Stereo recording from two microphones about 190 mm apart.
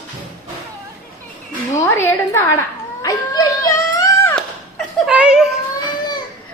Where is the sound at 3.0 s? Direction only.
20° left (ahead or behind).